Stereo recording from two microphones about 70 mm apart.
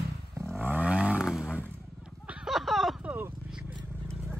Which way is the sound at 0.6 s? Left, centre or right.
Right.